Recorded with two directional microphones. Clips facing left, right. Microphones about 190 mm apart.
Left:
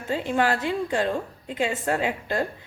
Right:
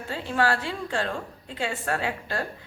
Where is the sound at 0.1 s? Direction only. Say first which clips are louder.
Left 2 dB; 20° left (ahead or behind).